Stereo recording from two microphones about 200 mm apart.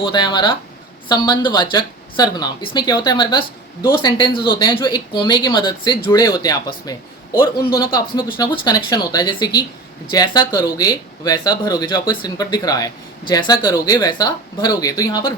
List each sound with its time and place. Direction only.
0.0 s a man's voice: 20° left (ahead or behind)